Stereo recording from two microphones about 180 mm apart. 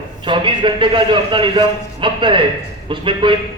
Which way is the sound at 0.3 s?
30° right (ahead or behind).